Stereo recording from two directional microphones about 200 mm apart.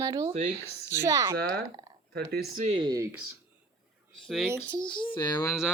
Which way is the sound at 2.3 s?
50° right (ahead or behind).